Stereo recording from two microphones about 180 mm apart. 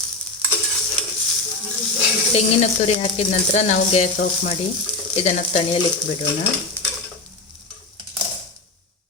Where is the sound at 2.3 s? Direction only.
35° left (ahead or behind).